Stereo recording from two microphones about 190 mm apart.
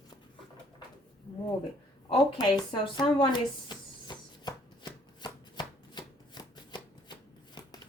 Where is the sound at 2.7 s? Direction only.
25° left (ahead or behind).